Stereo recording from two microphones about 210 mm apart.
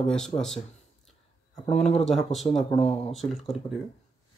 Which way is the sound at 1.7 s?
30° left (ahead or behind).